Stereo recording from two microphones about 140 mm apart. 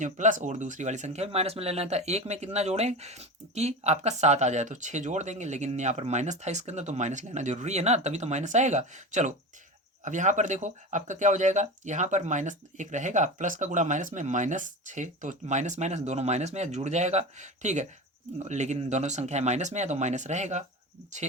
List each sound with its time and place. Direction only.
0.0 s speech: 65° right (ahead or behind)